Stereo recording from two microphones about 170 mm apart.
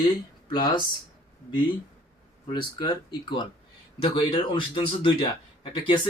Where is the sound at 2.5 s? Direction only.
25° left (ahead or behind).